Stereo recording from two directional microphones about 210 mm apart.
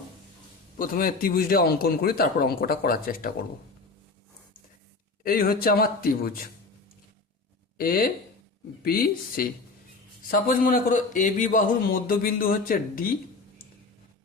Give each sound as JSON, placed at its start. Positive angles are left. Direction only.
{"t": 0.8, "sound": "a man's voice", "side_deg": 40}
{"t": 5.2, "sound": "a man's voice", "side_deg": 45}
{"t": 7.8, "sound": "a man's voice", "side_deg": 45}